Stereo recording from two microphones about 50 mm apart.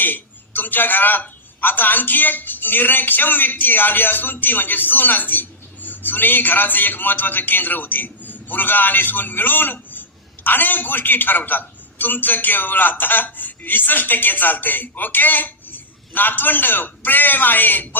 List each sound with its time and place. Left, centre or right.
0.0 s a woman's voice: left